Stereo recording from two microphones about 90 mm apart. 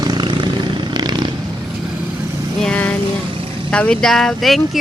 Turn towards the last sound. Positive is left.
turn(degrees=5)  # may be behind; listen again after turning